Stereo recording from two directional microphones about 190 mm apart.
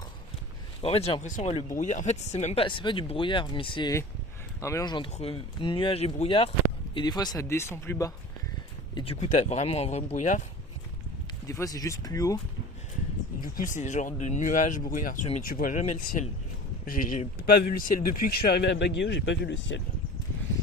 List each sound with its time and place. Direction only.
0.8 s speech: 30° left (ahead or behind); by 8.1 s 15° left (ahead or behind)
9.0 s speech: 30° left (ahead or behind)
11.4 s speech: 15° left (ahead or behind)
13.6 s speech: 40° left (ahead or behind); by 19.8 s 75° left (ahead or behind)